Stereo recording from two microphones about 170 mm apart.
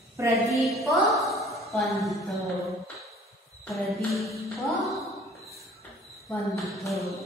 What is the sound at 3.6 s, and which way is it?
Speech, centre (ahead or behind).